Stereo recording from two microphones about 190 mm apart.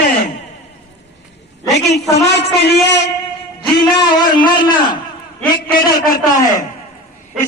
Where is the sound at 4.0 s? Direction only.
25° left (ahead or behind).